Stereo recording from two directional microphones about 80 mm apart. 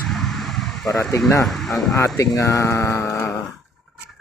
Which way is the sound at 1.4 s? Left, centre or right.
Centre.